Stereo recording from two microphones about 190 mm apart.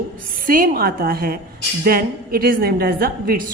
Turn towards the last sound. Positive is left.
turn(degrees=-50)  # may be behind; listen again after turning